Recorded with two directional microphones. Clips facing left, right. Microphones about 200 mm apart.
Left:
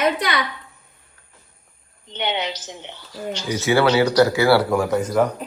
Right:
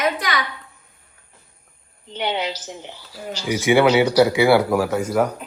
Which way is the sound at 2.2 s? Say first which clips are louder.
Right 1 dB; 10° right (ahead or behind).